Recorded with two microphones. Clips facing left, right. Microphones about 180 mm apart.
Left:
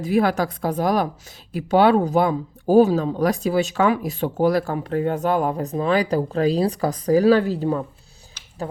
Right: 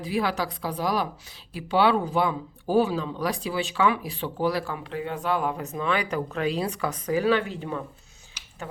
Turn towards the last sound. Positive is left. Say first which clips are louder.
# left 7 dB
turn(degrees=35)  # may be behind; listen again after turning